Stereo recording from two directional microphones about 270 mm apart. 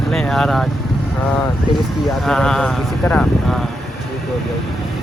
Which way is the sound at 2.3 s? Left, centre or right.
Centre.